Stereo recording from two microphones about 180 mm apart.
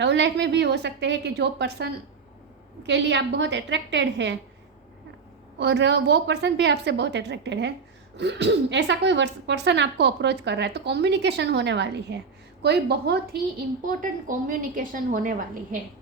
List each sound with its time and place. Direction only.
0.0 s a woman's voice: 75° right (ahead or behind)
2.8 s a woman's voice: 75° right (ahead or behind)
5.5 s a woman's voice: 75° right (ahead or behind)
13.8 s a woman's voice: 45° right (ahead or behind)